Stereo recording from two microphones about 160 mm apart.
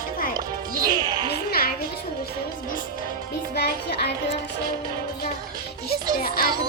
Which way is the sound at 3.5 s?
90° left.